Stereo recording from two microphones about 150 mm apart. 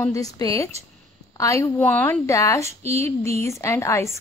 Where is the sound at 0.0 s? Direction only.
20° left (ahead or behind).